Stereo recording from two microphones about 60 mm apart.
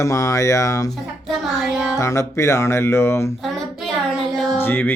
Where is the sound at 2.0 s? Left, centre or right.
Left.